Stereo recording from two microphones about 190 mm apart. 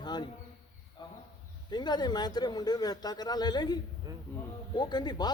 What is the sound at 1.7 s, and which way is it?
A man's voice, 20° left (ahead or behind).